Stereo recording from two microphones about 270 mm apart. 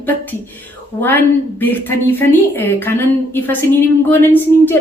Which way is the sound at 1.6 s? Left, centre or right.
Centre.